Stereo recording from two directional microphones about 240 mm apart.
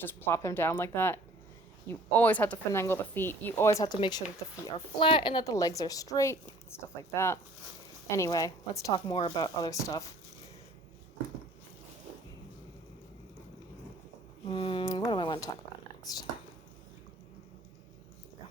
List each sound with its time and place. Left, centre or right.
0.0 s speech: centre
14.4 s speech: left